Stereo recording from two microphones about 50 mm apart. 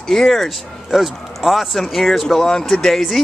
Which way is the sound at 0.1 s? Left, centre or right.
Centre.